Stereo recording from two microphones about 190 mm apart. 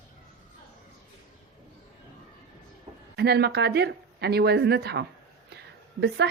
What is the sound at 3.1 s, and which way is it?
A woman's voice, 60° right (ahead or behind).